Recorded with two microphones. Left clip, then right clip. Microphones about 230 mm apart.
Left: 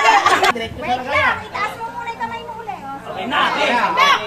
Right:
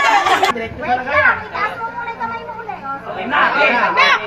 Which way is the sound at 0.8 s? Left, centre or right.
Left.